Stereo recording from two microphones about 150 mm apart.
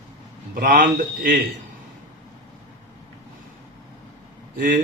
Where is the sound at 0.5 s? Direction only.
65° right (ahead or behind).